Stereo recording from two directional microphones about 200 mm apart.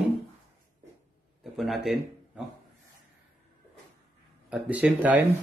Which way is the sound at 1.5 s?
Centre (ahead or behind).